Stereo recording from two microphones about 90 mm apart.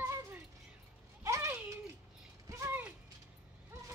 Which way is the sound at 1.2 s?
35° right (ahead or behind).